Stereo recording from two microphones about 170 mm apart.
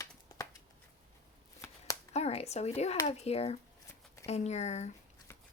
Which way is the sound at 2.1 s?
40° left (ahead or behind).